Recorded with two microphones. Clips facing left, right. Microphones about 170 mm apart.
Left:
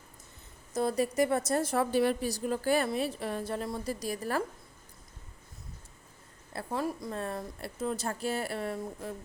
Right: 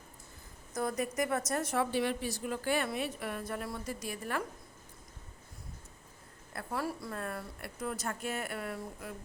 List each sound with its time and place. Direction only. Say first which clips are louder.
0.7 s a woman's voice: left 5 dB; 30° left (ahead or behind)
6.5 s a woman's voice: left 3 dB; 25° left (ahead or behind)